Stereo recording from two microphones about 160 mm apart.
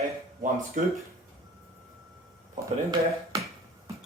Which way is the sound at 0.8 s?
50° right (ahead or behind).